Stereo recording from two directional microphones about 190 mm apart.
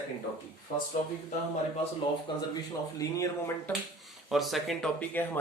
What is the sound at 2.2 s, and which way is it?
Speech, 20° left (ahead or behind).